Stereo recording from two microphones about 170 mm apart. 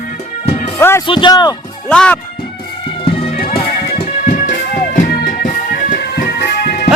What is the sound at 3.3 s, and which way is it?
Music, 65° left (ahead or behind).